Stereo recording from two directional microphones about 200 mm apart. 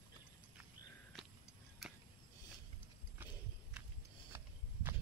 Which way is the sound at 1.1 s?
Centre (ahead or behind).